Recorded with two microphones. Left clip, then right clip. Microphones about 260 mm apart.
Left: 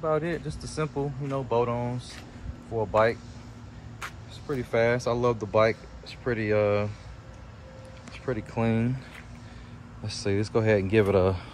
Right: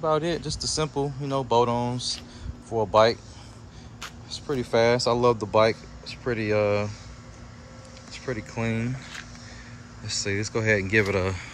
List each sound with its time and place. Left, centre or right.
0.0 s speech: centre
0.5 s speech: right
0.7 s speech: centre
8.1 s speech: centre